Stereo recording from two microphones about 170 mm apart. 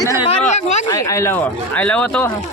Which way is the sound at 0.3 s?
45° left (ahead or behind).